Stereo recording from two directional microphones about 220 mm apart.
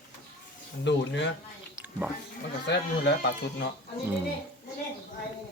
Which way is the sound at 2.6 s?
50° left (ahead or behind).